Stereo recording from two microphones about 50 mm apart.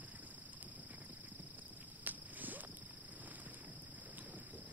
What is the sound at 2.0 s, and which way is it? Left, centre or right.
Cricket, right.